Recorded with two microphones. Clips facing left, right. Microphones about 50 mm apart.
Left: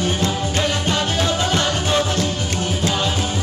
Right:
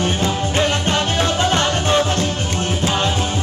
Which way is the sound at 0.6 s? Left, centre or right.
Right.